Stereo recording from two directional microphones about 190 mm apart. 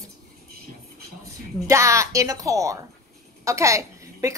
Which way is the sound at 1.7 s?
15° right (ahead or behind).